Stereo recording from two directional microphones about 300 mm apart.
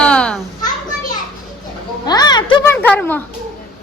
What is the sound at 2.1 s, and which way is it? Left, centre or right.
Speech, centre.